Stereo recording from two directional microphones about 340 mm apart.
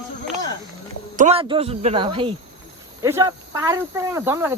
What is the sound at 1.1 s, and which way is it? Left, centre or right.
Speech, centre.